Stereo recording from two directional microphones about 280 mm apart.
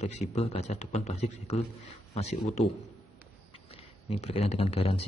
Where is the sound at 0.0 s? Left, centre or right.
Left.